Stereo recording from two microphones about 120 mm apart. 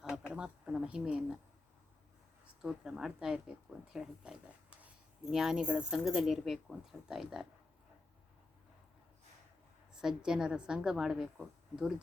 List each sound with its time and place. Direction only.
0.0 s a sound: 5° right (ahead or behind)
0.3 s a woman's voice: 10° right (ahead or behind)
2.6 s speech: 5° right (ahead or behind)
9.9 s speech: 5° right (ahead or behind)